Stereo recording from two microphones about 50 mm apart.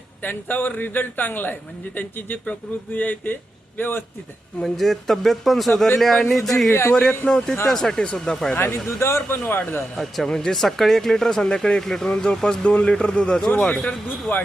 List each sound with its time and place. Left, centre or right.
0.2 s a man's voice: left
4.6 s a man's voice: centre
8.5 s speech: left
9.0 s speech: left
9.5 s speech: left
10.2 s speech: centre